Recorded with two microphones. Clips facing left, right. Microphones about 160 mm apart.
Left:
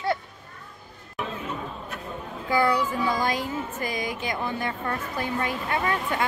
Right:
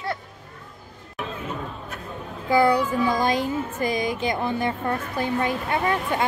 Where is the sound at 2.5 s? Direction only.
25° right (ahead or behind).